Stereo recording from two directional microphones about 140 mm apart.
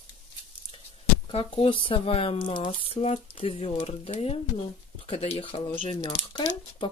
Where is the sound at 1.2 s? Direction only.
40° left (ahead or behind).